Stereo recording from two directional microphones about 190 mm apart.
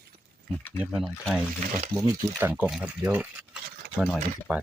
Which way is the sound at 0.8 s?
Centre (ahead or behind).